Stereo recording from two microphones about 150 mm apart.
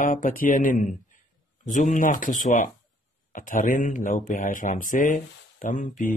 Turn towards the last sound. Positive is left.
turn(degrees=60)  # may be behind; listen again after turning